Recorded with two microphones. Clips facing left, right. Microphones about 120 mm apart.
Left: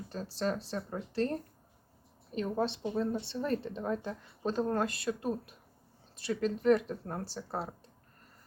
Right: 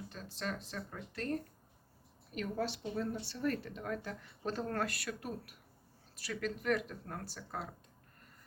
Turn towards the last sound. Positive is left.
turn(degrees=30)  # may be behind; listen again after turning